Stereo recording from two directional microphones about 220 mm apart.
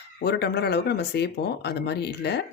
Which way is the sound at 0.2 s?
45° left (ahead or behind).